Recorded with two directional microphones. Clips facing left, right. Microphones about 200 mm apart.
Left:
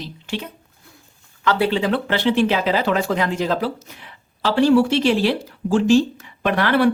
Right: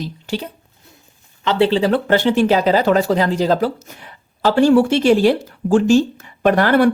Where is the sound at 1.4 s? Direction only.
25° right (ahead or behind).